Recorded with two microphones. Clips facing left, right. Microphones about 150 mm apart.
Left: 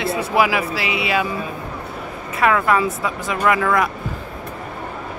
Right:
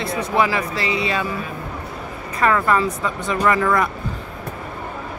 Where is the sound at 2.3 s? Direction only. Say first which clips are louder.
Left 1 dB; 5° left (ahead or behind).